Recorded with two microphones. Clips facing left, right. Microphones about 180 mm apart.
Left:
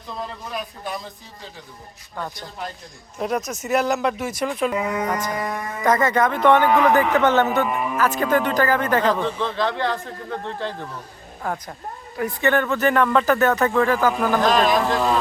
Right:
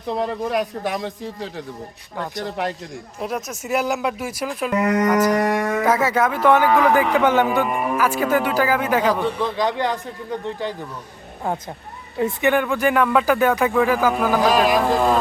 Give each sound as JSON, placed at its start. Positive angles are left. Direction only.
{"t": 0.1, "sound": "a man's voice", "side_deg": -65}
{"t": 3.2, "sound": "speech", "side_deg": 0}
{"t": 4.7, "sound": "a man's voice", "side_deg": -75}
{"t": 5.8, "sound": "speech", "side_deg": -5}
{"t": 12.1, "sound": "speech", "side_deg": -25}
{"t": 12.5, "sound": "speech", "side_deg": -10}